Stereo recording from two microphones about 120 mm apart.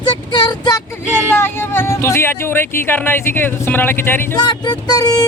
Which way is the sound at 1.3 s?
20° left (ahead or behind).